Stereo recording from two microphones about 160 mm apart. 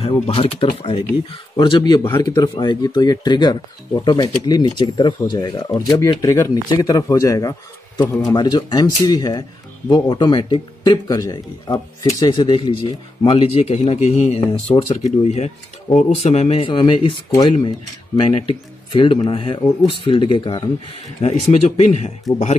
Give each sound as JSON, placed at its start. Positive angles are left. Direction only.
{"t": 0.0, "sound": "speech", "side_deg": 35}
{"t": 21.2, "sound": "speech", "side_deg": 40}